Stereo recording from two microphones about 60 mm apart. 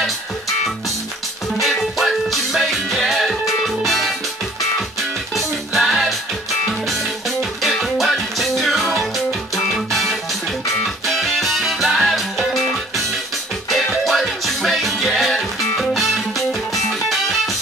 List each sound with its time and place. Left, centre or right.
1.6 s music: centre
5.3 s music: centre
13.7 s music: centre